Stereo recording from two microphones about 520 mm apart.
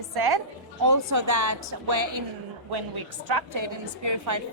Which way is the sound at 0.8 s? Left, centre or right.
Right.